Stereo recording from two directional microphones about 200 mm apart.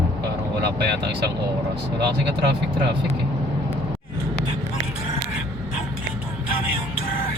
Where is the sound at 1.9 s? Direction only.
55° right (ahead or behind).